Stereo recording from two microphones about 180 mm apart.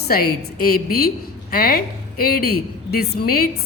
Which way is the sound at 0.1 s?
55° left (ahead or behind).